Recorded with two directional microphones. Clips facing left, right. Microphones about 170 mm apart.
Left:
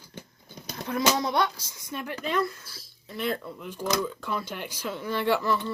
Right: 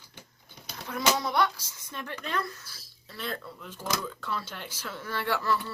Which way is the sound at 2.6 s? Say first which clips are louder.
Left 4 dB; 20° left (ahead or behind).